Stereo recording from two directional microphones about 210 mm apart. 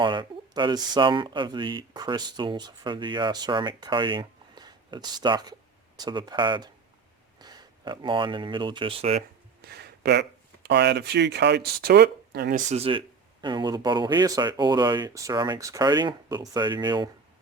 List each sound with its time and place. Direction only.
0.0 s speech: 20° right (ahead or behind)
9.6 s speech: 50° right (ahead or behind); by 17.1 s 20° right (ahead or behind)